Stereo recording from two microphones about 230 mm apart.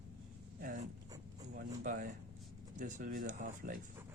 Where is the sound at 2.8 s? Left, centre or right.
Right.